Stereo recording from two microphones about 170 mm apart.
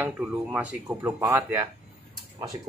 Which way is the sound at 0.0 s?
10° right (ahead or behind).